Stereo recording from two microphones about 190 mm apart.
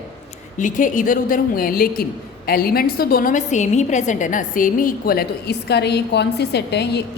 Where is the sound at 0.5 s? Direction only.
45° left (ahead or behind).